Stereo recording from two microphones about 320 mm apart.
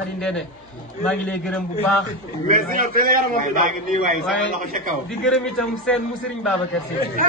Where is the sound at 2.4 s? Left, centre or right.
Right.